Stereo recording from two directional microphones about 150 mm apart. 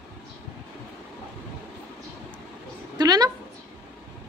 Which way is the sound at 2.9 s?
25° right (ahead or behind).